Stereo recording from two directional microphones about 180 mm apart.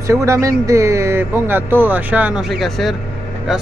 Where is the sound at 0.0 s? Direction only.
15° right (ahead or behind).